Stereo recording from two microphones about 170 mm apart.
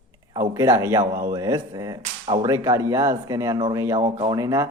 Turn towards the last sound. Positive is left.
turn(degrees=-20)  # may be behind; listen again after turning